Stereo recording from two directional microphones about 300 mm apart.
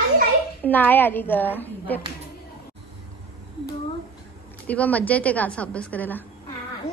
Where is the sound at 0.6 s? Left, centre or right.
Centre.